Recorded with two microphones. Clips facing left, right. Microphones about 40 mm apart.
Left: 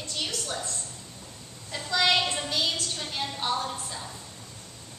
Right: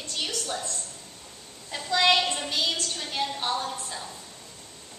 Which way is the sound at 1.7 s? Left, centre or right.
Centre.